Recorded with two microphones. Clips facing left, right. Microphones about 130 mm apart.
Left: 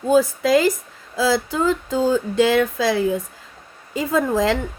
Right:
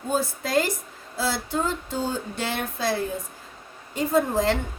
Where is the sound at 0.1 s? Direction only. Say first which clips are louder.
Left 8 dB; 90° left.